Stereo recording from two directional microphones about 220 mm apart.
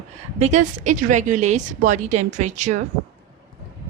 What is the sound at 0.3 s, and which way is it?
Speech, 30° right (ahead or behind).